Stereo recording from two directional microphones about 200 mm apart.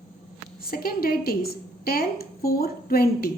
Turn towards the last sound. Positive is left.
turn(degrees=50)  # may be behind; listen again after turning